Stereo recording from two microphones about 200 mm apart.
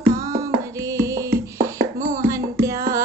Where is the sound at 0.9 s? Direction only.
15° right (ahead or behind).